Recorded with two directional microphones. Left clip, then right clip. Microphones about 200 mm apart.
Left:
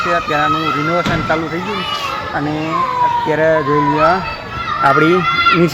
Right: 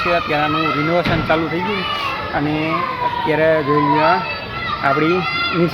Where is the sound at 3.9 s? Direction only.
40° left (ahead or behind).